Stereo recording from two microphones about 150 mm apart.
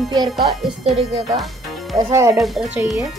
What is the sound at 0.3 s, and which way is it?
Speech, centre (ahead or behind).